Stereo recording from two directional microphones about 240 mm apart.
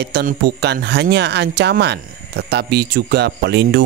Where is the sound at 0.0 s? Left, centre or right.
Right.